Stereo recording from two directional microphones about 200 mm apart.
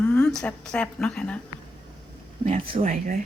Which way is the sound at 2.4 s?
35° right (ahead or behind).